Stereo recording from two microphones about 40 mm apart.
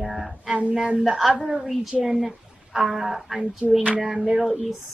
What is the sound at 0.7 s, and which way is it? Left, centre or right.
Speech, centre.